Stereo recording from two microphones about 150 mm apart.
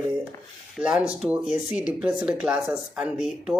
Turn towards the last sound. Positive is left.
turn(degrees=-5)  # may be behind; listen again after turning